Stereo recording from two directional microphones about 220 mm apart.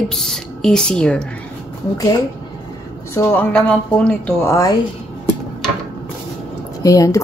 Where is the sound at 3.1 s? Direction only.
10° left (ahead or behind).